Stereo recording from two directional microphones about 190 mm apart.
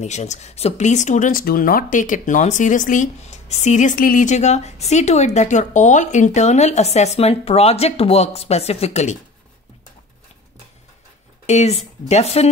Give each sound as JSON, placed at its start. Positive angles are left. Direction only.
{"t": 0.0, "sound": "speech", "side_deg": 35}
{"t": 11.4, "sound": "speech", "side_deg": 35}